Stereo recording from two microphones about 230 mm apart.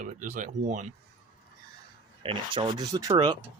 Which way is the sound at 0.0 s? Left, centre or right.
Right.